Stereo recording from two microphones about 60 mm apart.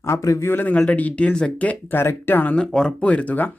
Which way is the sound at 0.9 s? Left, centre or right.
Left.